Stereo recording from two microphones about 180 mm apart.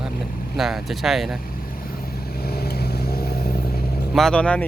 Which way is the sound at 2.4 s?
60° left (ahead or behind).